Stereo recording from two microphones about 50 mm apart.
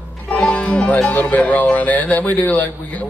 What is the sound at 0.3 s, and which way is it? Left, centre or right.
Speech, left.